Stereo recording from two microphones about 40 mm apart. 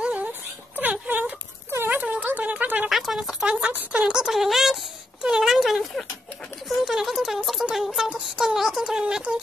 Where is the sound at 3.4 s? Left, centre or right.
Right.